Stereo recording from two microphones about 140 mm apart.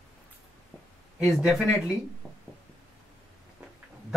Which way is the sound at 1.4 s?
Centre (ahead or behind).